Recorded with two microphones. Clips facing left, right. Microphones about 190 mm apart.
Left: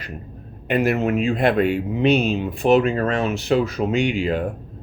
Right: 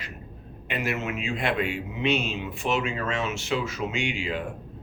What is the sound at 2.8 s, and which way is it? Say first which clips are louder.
Speech: left 9 dB; 60° left (ahead or behind).